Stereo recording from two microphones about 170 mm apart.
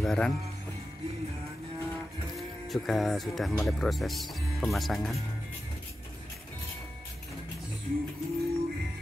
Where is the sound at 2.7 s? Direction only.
Centre (ahead or behind).